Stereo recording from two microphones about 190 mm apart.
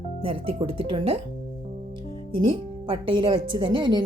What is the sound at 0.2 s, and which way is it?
A woman's voice, 30° right (ahead or behind).